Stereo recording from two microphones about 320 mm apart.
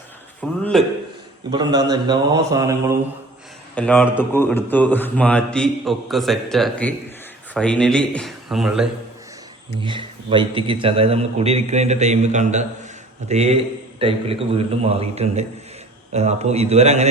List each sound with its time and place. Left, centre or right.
0.6 s a man's voice: centre
1.5 s a man's voice: centre
3.8 s a man's voice: centre
9.8 s a man's voice: centre